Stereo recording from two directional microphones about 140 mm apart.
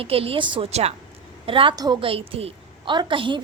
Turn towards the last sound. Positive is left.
turn(degrees=-35)  # may be behind; listen again after turning